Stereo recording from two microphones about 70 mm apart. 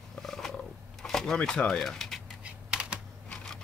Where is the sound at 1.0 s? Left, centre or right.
Centre.